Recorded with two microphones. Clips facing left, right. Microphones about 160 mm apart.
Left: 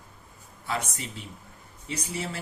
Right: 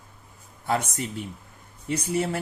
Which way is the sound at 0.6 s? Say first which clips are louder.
Right 6 dB; 50° right (ahead or behind).